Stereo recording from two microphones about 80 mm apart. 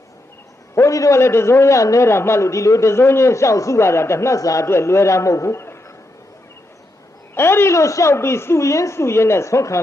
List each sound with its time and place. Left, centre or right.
0.8 s a man's voice: left
7.3 s a man's voice: left